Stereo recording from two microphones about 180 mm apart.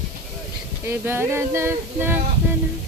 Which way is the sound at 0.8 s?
15° right (ahead or behind).